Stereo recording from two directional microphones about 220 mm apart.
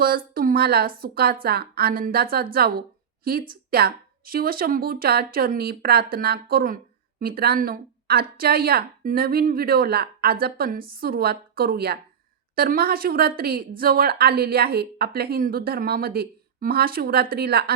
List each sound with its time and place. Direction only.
0.0 s a woman's voice: 40° right (ahead or behind)